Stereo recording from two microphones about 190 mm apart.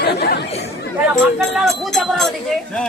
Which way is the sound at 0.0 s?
60° left (ahead or behind).